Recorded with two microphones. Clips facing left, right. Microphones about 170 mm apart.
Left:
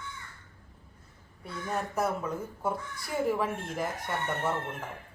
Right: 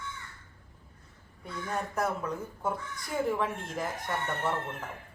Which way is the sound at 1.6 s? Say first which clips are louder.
Left 1 dB; 5° left (ahead or behind).